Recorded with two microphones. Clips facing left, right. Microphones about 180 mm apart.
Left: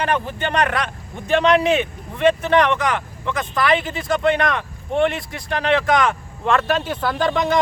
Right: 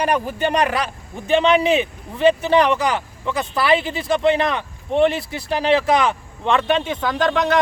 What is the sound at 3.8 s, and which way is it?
Speech, 30° right (ahead or behind).